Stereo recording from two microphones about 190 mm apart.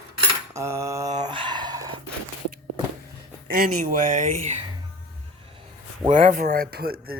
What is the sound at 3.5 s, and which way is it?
Speech, 50° right (ahead or behind).